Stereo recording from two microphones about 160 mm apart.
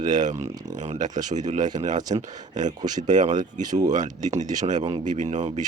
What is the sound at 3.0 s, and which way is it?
Speech, 50° right (ahead or behind).